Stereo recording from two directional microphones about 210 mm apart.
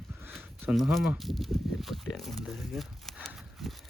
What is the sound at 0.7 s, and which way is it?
Speech, centre (ahead or behind).